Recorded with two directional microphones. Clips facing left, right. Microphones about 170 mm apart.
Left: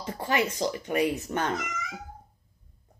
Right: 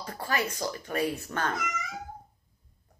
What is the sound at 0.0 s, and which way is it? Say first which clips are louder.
Speech: left 4 dB; 20° left (ahead or behind).